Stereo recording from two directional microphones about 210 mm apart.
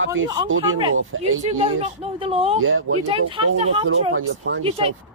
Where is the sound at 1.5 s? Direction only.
30° right (ahead or behind).